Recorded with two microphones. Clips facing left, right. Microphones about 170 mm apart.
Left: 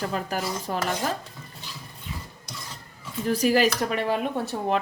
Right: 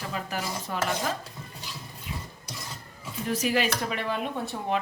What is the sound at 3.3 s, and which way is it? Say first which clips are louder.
Speech: left 5 dB; 35° left (ahead or behind).